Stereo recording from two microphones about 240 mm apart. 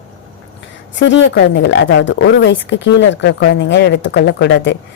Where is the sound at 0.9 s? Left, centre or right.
Left.